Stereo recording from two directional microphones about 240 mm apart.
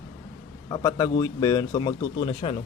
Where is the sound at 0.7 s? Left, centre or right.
Centre.